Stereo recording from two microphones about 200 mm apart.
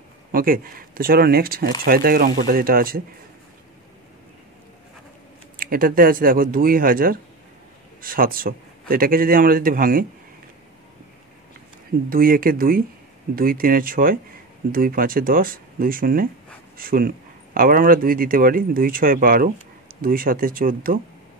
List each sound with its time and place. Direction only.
0.3 s speech: 45° right (ahead or behind)
5.6 s speech: 45° right (ahead or behind)
12.1 s speech: 45° right (ahead or behind)